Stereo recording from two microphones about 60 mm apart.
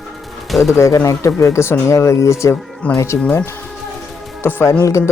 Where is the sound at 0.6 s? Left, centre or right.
Left.